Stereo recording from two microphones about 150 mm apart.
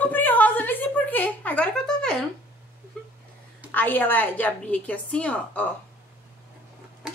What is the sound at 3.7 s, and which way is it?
A woman's voice, 10° left (ahead or behind).